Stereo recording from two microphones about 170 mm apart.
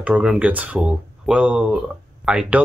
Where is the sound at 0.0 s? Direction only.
5° right (ahead or behind).